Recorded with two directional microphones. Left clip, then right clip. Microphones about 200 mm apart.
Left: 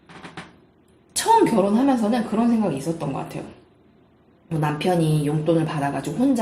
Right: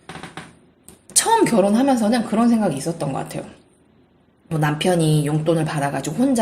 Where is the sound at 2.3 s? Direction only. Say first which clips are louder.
Right 3 dB; 45° right (ahead or behind).